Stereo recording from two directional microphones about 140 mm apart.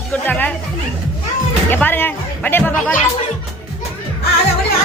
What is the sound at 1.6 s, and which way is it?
Speech, 15° left (ahead or behind).